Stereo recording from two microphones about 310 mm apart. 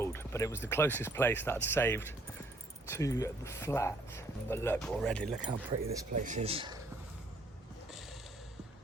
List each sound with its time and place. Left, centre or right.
0.0 s speech: centre
5.8 s speech: right